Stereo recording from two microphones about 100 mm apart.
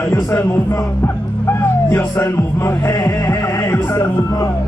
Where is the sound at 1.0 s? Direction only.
25° left (ahead or behind).